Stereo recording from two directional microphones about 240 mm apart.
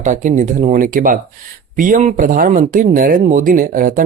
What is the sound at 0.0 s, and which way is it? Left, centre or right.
Speech, right.